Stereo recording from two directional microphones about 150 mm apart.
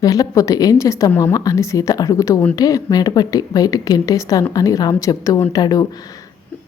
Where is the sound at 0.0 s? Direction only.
25° left (ahead or behind).